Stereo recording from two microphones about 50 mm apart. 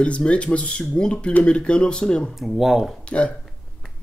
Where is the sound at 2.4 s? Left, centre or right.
Centre.